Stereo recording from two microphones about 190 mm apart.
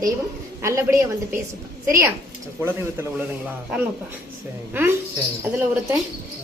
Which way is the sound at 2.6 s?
10° right (ahead or behind).